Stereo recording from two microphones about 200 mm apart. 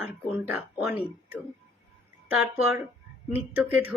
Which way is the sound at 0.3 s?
10° right (ahead or behind).